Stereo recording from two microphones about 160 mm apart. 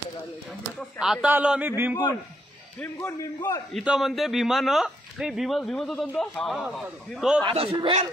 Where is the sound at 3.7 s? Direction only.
Centre (ahead or behind).